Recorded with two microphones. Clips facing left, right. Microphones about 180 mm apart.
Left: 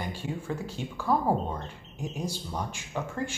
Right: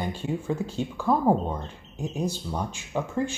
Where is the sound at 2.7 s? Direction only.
15° right (ahead or behind).